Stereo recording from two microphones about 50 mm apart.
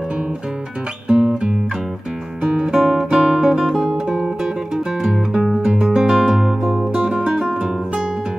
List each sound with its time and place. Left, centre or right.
1.0 s music: centre
2.5 s music: centre